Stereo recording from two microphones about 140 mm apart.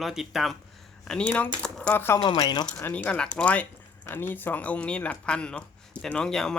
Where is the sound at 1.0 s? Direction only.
10° left (ahead or behind).